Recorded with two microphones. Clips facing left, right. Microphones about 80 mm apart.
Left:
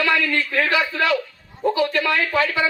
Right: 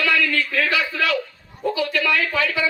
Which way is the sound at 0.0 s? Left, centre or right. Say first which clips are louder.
Left 1 dB; left.